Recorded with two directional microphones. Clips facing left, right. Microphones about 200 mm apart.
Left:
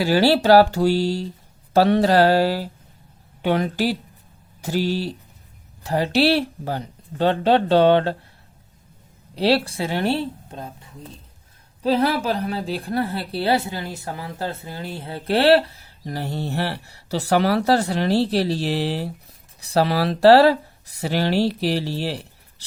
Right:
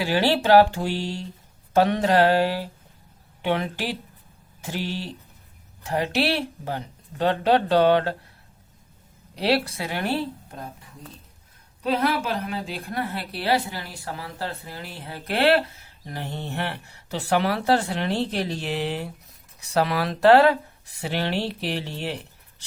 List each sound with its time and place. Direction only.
0.0 s a woman's voice: 40° left (ahead or behind)
9.3 s a woman's voice: 30° left (ahead or behind)